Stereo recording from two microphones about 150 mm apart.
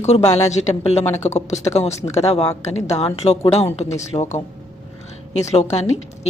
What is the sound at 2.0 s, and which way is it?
Speech, 45° left (ahead or behind).